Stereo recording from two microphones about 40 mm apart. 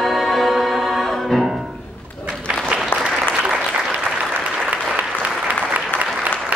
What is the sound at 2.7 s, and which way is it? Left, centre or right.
Applause, right.